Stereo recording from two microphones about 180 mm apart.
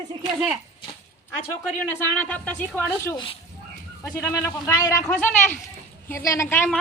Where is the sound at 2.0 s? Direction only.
5° left (ahead or behind).